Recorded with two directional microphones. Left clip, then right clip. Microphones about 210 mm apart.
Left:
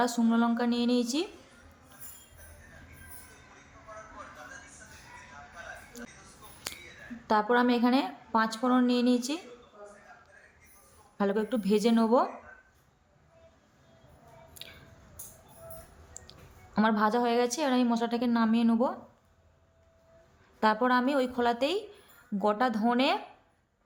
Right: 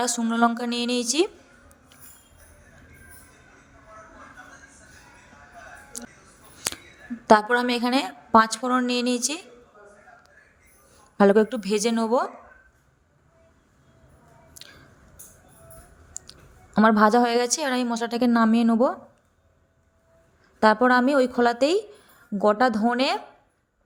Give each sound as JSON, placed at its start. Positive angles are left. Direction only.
{"t": 0.0, "sound": "a woman's voice", "side_deg": -35}
{"t": 5.9, "sound": "a sound", "side_deg": -40}
{"t": 7.3, "sound": "a woman's voice", "side_deg": -40}
{"t": 11.2, "sound": "a woman's voice", "side_deg": -35}
{"t": 14.6, "sound": "a sound", "side_deg": -15}
{"t": 16.1, "sound": "clicking", "side_deg": -30}
{"t": 16.7, "sound": "a woman's voice", "side_deg": -30}
{"t": 20.6, "sound": "a woman's voice", "side_deg": -30}